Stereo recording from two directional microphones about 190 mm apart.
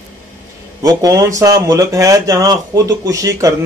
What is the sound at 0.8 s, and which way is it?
Speech, 20° right (ahead or behind).